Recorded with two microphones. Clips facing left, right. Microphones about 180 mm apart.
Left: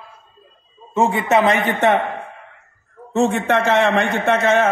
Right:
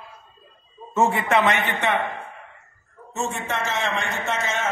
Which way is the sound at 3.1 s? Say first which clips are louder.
Left 11 dB; 60° left (ahead or behind).